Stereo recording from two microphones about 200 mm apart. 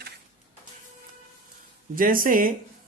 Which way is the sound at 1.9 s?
45° right (ahead or behind).